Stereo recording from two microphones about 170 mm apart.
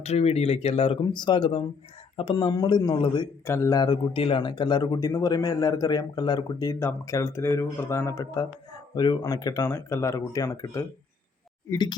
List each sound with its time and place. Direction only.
0.0 s a man's voice: 40° left (ahead or behind)